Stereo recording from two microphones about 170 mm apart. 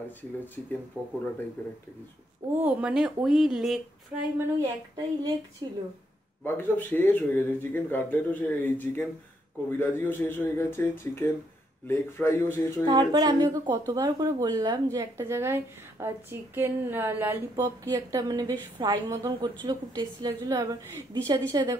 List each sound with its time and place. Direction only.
1.0 s speech: 10° right (ahead or behind)
1.6 s speech: 10° left (ahead or behind)
2.5 s speech: 10° right (ahead or behind)
4.6 s speech: 20° right (ahead or behind)
6.4 s speech: 10° left (ahead or behind)
12.8 s speech: 25° right (ahead or behind)